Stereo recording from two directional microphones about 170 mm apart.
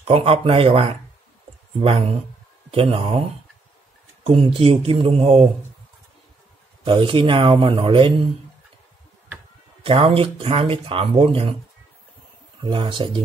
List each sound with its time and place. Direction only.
0.0 s speech: 35° right (ahead or behind)
4.6 s speech: 35° right (ahead or behind)
6.8 s speech: 30° right (ahead or behind)
9.8 s speech: 35° right (ahead or behind)
12.6 s speech: 30° right (ahead or behind)